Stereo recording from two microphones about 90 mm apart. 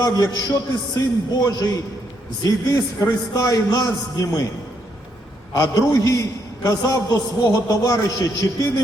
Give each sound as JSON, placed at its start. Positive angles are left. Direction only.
{"t": 0.0, "sound": "a man's voice", "side_deg": 45}
{"t": 5.9, "sound": "a man's voice", "side_deg": 35}